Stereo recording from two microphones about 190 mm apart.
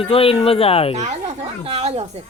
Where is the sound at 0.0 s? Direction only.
30° left (ahead or behind).